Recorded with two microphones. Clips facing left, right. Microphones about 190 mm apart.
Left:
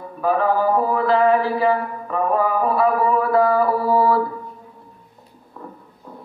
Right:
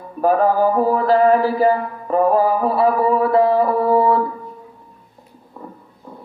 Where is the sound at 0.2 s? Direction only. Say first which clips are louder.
Right 4 dB; 45° right (ahead or behind); by 4.2 s 20° right (ahead or behind).